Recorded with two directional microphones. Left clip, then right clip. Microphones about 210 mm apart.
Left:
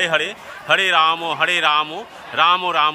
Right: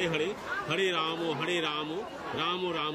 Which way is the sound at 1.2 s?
30° left (ahead or behind).